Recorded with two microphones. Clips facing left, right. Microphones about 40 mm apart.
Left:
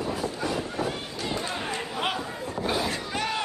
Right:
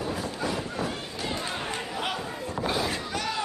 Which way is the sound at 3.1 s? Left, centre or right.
Left.